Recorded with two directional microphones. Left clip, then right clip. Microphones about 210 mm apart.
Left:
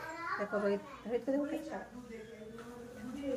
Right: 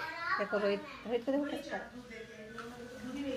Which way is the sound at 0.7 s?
15° right (ahead or behind).